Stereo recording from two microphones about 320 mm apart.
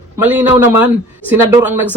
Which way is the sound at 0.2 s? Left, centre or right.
Centre.